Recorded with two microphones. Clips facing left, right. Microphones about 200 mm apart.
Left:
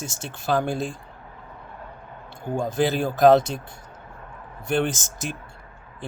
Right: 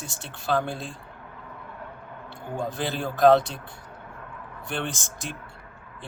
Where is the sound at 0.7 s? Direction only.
45° left (ahead or behind).